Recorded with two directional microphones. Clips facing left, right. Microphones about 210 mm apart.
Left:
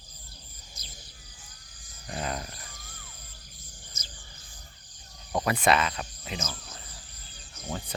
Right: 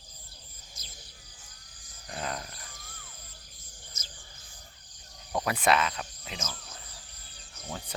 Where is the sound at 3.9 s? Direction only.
45° right (ahead or behind).